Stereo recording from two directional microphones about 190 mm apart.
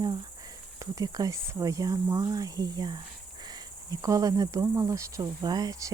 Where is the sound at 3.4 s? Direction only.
20° right (ahead or behind).